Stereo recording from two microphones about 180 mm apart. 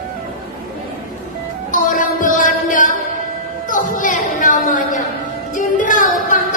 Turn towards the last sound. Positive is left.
turn(degrees=45)  # may be behind; listen again after turning